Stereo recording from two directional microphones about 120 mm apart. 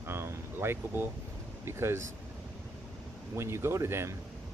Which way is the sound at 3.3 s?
20° right (ahead or behind).